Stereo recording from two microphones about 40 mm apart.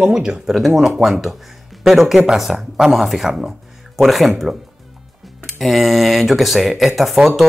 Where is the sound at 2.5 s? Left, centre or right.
Right.